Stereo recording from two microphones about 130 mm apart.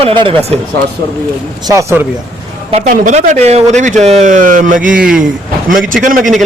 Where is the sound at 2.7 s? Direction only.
75° right (ahead or behind).